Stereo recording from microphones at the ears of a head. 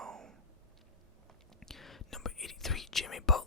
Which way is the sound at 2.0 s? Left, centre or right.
Left.